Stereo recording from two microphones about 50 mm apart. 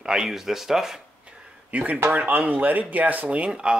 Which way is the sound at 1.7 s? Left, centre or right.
Right.